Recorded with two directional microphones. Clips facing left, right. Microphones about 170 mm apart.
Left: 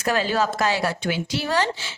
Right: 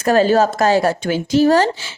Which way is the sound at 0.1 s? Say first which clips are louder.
Right 9 dB; 45° right (ahead or behind).